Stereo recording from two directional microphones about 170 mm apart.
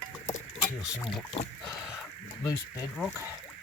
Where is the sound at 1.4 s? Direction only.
30° left (ahead or behind).